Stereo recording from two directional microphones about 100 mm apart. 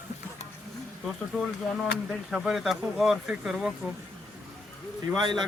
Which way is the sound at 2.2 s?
5° right (ahead or behind).